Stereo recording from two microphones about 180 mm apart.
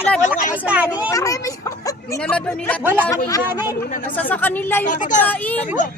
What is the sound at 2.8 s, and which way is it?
Speech, 10° right (ahead or behind).